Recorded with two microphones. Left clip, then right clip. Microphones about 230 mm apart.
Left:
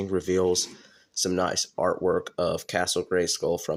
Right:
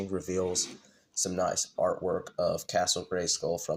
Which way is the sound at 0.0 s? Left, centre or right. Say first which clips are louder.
Left 7 dB; left.